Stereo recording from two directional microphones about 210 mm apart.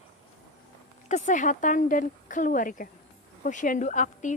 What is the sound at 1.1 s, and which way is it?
A woman's voice, 35° left (ahead or behind).